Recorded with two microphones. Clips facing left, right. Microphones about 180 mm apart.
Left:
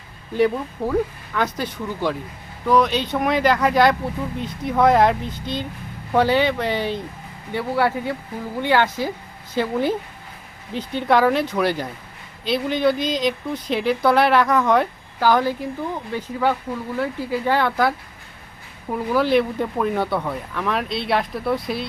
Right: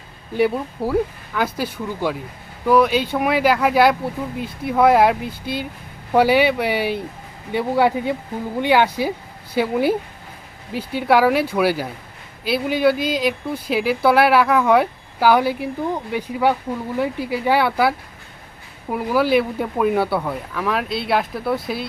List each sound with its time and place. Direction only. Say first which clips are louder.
0.3 s speech: even; 5° right (ahead or behind)